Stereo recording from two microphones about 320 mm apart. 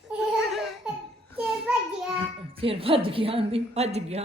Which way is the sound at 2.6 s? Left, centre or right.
Centre.